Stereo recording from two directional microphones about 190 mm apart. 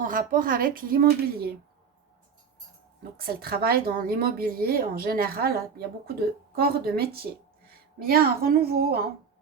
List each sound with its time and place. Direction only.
0.0 s a woman's voice: 45° right (ahead or behind)
3.0 s a woman's voice: 55° right (ahead or behind)